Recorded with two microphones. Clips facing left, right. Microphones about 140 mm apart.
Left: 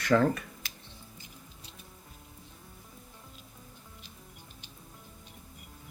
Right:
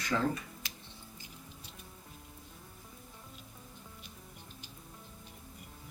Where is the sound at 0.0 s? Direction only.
65° left (ahead or behind).